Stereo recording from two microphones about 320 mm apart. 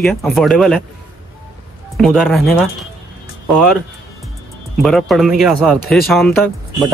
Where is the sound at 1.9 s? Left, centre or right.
Centre.